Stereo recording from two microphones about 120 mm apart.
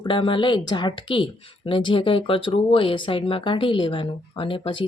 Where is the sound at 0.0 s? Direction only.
45° left (ahead or behind).